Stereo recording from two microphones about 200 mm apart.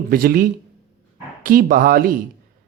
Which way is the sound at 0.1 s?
45° right (ahead or behind).